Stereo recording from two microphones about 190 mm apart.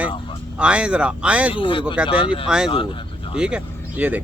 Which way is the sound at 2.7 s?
30° left (ahead or behind).